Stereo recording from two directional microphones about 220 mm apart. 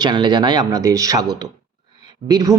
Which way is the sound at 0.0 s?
20° right (ahead or behind).